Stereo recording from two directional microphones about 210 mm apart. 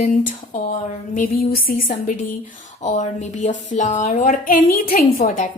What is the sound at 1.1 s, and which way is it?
A woman's voice, 40° left (ahead or behind).